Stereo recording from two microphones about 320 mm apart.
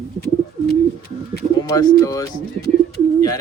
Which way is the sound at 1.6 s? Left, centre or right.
Centre.